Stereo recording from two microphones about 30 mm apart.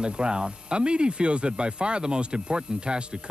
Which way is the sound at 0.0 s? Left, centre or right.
Right.